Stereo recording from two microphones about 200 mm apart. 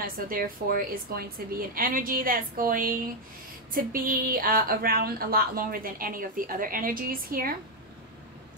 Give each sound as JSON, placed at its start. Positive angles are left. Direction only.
{"t": 0.0, "sound": "speech", "side_deg": -45}